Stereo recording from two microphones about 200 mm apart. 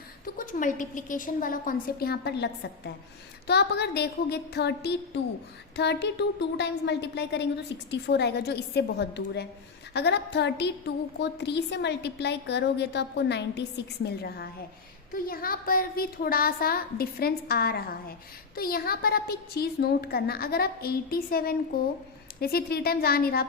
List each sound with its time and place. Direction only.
0.3 s a woman's voice: 40° left (ahead or behind)